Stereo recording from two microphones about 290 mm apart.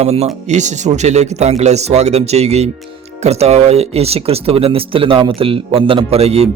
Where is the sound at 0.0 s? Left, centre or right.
Right.